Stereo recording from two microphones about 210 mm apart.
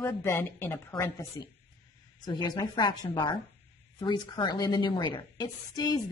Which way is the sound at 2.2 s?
20° left (ahead or behind).